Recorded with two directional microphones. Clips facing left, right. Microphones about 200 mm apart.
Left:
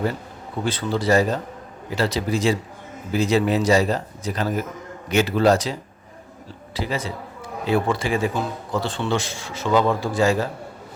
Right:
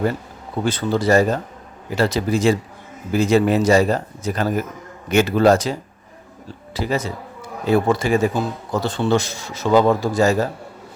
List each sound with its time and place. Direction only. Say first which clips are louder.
0.6 s a man's voice: right 4 dB; 45° right (ahead or behind)
6.7 s a man's voice: right 4 dB; 45° right (ahead or behind)